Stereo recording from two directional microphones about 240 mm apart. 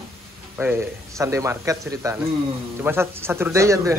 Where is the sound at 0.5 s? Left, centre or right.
Centre.